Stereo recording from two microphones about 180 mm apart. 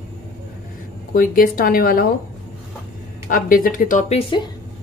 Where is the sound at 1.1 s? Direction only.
50° left (ahead or behind).